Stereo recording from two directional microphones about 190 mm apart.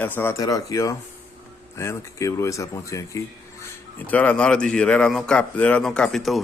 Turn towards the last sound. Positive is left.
turn(degrees=0)  # may be behind; listen again after turning